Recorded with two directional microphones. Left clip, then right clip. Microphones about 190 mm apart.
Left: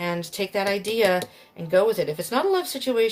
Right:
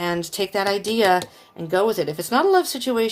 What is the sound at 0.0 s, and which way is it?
Speech, 50° right (ahead or behind).